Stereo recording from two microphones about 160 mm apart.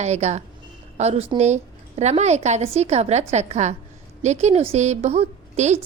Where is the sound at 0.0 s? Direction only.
45° right (ahead or behind).